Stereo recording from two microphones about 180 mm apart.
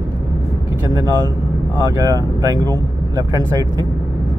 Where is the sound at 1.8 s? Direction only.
20° right (ahead or behind).